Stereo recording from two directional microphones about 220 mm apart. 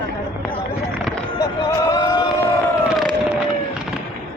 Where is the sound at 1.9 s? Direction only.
15° left (ahead or behind).